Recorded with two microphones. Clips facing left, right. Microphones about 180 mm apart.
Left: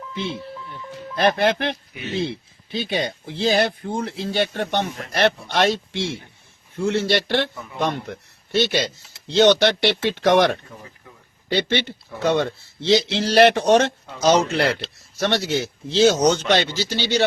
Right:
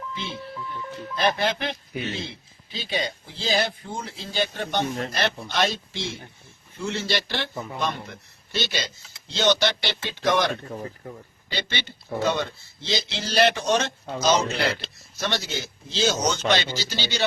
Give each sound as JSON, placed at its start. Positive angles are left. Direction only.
{"t": 1.1, "sound": "a man's voice", "side_deg": 60}
{"t": 10.7, "sound": "speech", "side_deg": -45}
{"t": 11.4, "sound": "a man's voice", "side_deg": 60}